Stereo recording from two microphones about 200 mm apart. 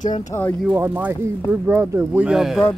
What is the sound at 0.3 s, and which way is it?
Speech, 10° left (ahead or behind).